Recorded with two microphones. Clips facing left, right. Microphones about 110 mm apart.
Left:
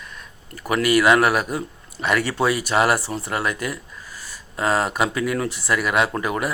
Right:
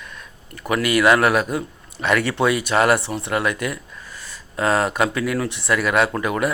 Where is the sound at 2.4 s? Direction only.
35° left (ahead or behind).